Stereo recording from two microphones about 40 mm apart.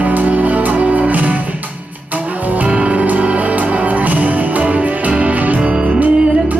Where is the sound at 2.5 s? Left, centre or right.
Right.